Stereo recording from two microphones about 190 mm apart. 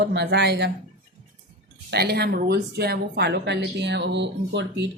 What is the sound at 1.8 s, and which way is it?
Speech, 60° right (ahead or behind).